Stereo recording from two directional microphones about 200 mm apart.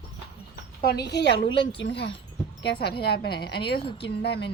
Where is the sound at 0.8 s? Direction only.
50° left (ahead or behind).